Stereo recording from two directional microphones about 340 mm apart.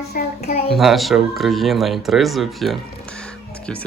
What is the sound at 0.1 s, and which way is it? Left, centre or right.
Speech, left.